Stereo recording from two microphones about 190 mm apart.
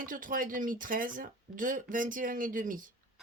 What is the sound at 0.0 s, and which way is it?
Speech, 45° right (ahead or behind).